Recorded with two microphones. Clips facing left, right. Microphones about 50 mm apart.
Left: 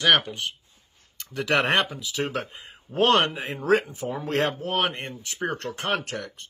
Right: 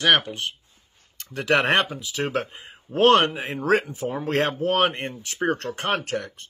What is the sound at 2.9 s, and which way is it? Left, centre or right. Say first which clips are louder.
Speech: right 3 dB; right.